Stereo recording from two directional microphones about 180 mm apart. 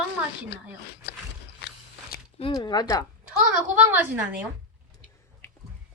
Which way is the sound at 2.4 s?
30° left (ahead or behind).